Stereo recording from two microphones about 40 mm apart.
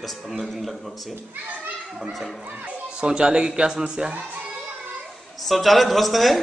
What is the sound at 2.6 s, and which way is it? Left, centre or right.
Speech, right.